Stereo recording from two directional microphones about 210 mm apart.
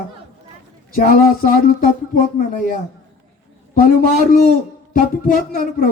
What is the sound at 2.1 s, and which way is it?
Speech, 40° left (ahead or behind).